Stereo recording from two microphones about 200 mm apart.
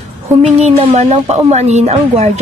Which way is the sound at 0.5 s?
30° right (ahead or behind).